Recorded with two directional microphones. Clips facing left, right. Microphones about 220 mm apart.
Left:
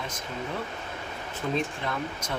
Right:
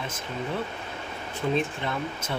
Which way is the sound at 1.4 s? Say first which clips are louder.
Right 3 dB; 15° right (ahead or behind).